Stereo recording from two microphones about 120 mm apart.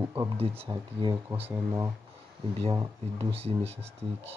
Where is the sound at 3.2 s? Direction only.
55° right (ahead or behind).